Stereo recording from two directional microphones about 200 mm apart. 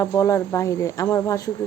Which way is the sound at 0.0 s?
15° left (ahead or behind).